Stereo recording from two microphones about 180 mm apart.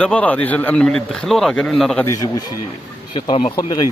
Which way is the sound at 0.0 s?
10° left (ahead or behind).